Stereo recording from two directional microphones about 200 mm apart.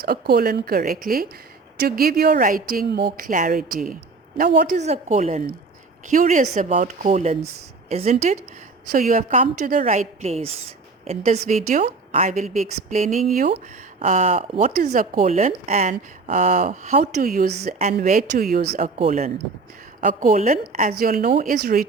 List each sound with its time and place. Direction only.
0.0 s a woman's voice: 50° right (ahead or behind); by 13.2 s 35° right (ahead or behind)
13.3 s a woman's voice: 45° right (ahead or behind)
14.0 s a woman's voice: 35° right (ahead or behind)
18.9 s speech: 30° right (ahead or behind)
20.0 s speech: 40° right (ahead or behind)